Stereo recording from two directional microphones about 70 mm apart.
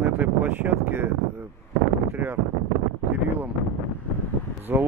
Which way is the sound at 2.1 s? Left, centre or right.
Right.